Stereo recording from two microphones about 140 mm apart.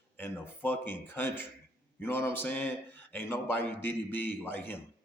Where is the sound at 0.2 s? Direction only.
15° left (ahead or behind).